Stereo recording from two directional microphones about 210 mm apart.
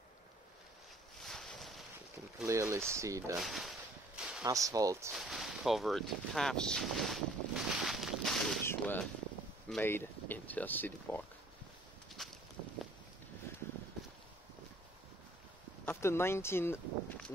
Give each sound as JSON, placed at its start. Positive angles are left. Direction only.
{"t": 1.2, "sound": "a sound", "side_deg": 0}
{"t": 2.4, "sound": "speech", "side_deg": -15}
{"t": 3.3, "sound": "speech", "side_deg": 0}
{"t": 4.2, "sound": "a sound", "side_deg": -5}
{"t": 4.5, "sound": "speech", "side_deg": -15}
{"t": 5.1, "sound": "a sound", "side_deg": 0}
{"t": 9.7, "sound": "speech", "side_deg": 10}
{"t": 12.2, "sound": "walk", "side_deg": 0}
{"t": 15.8, "sound": "speech", "side_deg": 10}